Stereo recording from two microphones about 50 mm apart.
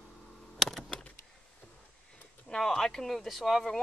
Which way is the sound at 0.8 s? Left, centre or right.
Centre.